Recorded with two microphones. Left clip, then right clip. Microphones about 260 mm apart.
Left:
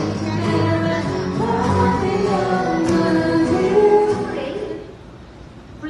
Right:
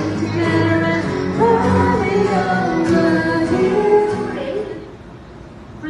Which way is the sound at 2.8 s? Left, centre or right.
Left.